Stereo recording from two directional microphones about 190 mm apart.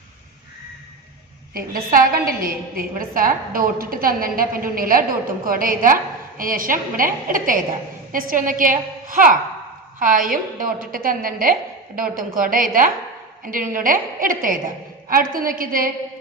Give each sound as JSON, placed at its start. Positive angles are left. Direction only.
{"t": 1.5, "sound": "a woman's voice", "side_deg": -50}